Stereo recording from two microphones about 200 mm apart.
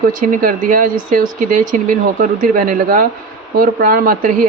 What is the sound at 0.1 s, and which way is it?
Speech, 40° right (ahead or behind).